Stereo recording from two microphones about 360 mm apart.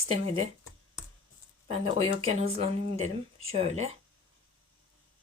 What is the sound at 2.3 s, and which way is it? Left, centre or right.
Speech, centre.